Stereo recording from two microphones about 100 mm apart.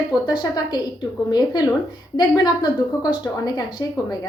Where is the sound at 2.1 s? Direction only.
45° left (ahead or behind).